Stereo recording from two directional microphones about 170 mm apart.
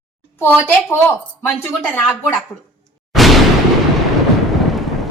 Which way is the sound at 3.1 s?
Centre (ahead or behind).